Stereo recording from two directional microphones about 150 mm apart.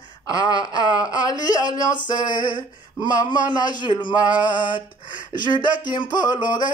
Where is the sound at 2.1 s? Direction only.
30° left (ahead or behind).